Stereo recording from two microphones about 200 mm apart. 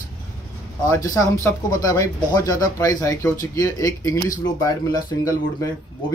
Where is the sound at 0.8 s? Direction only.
15° left (ahead or behind).